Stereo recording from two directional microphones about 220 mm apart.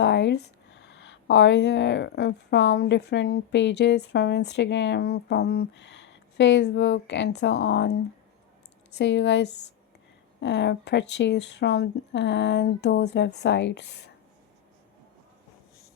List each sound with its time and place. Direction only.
0.0 s speech: 50° left (ahead or behind)